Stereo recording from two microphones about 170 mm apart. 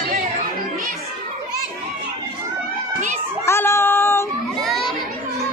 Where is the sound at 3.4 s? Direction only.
15° left (ahead or behind).